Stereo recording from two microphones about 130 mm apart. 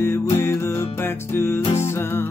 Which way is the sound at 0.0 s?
20° left (ahead or behind).